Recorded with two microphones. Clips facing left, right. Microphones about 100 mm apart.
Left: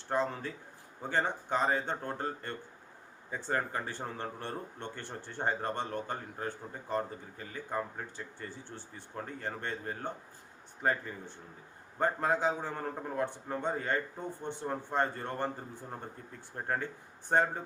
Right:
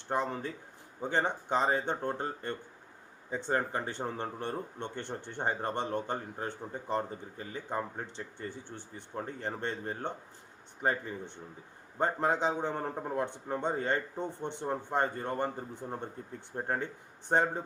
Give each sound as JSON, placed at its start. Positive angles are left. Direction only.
{"t": 0.1, "sound": "speech", "side_deg": -15}